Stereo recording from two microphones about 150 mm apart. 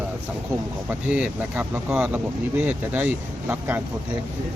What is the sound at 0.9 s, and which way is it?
Speech, 10° right (ahead or behind).